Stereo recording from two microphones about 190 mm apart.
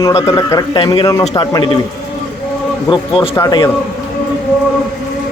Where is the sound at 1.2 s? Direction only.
30° left (ahead or behind).